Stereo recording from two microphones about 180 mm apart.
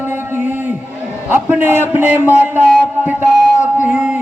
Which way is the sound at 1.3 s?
10° right (ahead or behind).